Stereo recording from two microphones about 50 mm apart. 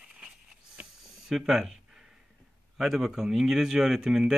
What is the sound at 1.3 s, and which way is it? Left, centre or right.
Speech, centre.